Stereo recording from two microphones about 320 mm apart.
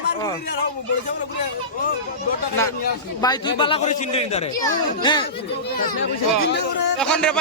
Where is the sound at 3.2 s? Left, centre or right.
Centre.